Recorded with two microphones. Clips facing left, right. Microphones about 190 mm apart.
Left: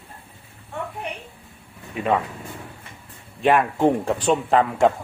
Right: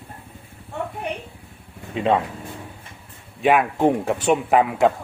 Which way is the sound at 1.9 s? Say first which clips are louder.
Right 2 dB; 25° right (ahead or behind).